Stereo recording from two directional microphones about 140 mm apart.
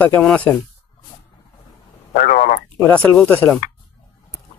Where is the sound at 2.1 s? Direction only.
70° left (ahead or behind).